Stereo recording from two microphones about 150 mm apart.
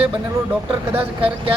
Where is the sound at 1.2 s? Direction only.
35° right (ahead or behind).